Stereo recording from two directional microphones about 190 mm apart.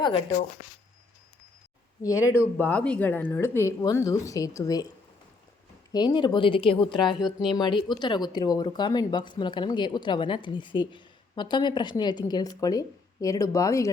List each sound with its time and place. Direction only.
0.0 s speech: 25° left (ahead or behind)
2.0 s a woman's voice: 15° left (ahead or behind)
5.9 s a woman's voice: 25° left (ahead or behind)